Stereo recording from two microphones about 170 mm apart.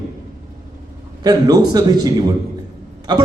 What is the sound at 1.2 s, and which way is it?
A man's voice, 25° right (ahead or behind).